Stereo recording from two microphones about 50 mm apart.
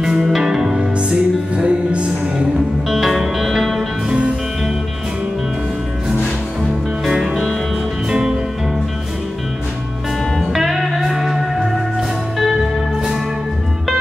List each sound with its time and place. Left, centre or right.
0.0 s music: centre
2.9 s music: centre
7.1 s music: centre
10.4 s music: centre